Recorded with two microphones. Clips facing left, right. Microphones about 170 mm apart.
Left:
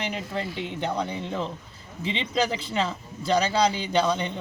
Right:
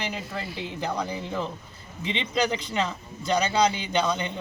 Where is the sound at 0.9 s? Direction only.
30° left (ahead or behind).